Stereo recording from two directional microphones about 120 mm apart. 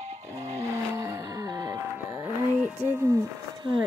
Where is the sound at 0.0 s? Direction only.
70° right (ahead or behind).